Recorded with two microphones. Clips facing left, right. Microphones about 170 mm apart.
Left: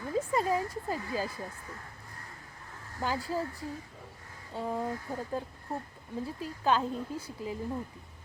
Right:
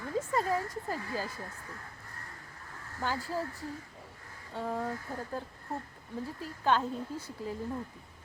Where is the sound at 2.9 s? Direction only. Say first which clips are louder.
Left 2 dB; 15° left (ahead or behind).